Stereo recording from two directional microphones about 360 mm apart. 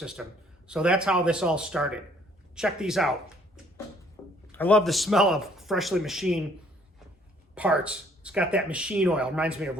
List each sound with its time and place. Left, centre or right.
0.0 s speech: centre
4.2 s a sound: centre
4.5 s speech: centre
7.5 s speech: centre